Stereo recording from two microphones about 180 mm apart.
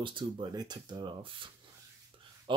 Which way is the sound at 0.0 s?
25° right (ahead or behind).